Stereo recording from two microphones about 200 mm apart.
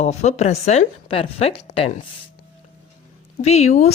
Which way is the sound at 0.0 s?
35° left (ahead or behind).